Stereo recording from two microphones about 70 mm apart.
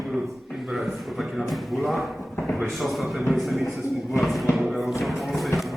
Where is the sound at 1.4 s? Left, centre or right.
Centre.